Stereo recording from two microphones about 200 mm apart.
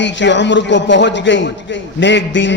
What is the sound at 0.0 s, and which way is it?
Speech, 65° left (ahead or behind).